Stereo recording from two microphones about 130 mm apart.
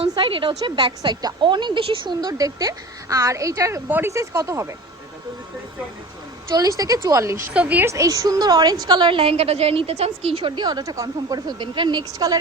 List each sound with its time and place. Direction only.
0.1 s a woman's voice: 40° right (ahead or behind); by 4.7 s 25° right (ahead or behind)
6.5 s speech: 25° right (ahead or behind)
7.5 s a woman's voice: 10° right (ahead or behind); by 12.4 s 30° right (ahead or behind)